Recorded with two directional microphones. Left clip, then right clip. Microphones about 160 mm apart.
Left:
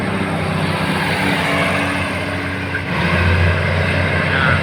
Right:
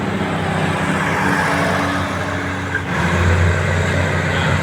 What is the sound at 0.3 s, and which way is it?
Vehicle, 90° left.